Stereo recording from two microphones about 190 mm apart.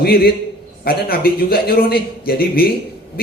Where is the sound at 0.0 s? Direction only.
55° left (ahead or behind).